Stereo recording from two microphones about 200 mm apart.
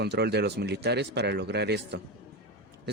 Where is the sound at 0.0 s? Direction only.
55° right (ahead or behind).